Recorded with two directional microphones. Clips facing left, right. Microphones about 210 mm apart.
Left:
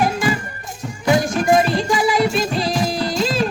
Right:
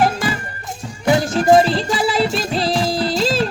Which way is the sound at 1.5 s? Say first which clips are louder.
Right 5 dB; 30° right (ahead or behind).